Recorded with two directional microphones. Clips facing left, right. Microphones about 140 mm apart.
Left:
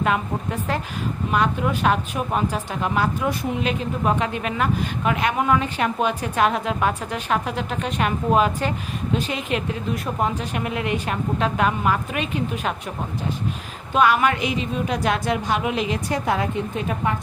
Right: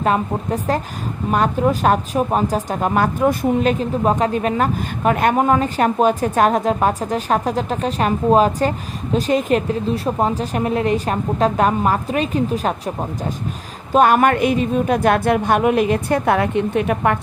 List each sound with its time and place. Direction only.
0.0 s a woman's voice: 40° right (ahead or behind); by 17.2 s 65° right (ahead or behind)